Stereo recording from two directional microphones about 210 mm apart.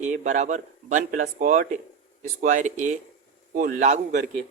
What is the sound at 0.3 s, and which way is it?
Speech, 35° right (ahead or behind).